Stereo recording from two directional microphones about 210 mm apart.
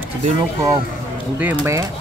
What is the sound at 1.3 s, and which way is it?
Speech, 10° right (ahead or behind).